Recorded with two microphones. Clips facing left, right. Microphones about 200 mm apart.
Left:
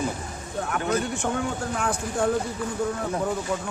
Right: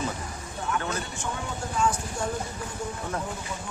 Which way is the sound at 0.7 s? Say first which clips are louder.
Left 5 dB; 55° left (ahead or behind).